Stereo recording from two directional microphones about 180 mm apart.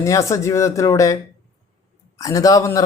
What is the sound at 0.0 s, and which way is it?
A man's voice, 15° left (ahead or behind).